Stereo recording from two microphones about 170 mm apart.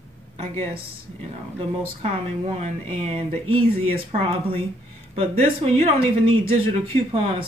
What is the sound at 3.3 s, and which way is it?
Speech, 35° right (ahead or behind).